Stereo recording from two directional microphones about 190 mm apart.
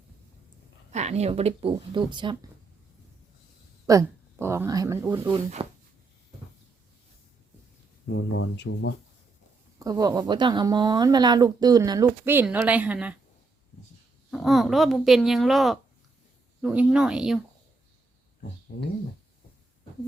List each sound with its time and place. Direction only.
0.9 s speech: 35° right (ahead or behind)
3.8 s speech: 15° right (ahead or behind)
5.6 s speech: 25° right (ahead or behind)
8.0 s speech: 90° left; by 9.0 s 70° left (ahead or behind)
9.7 s speech: 20° right (ahead or behind)
14.3 s speech: centre (ahead or behind)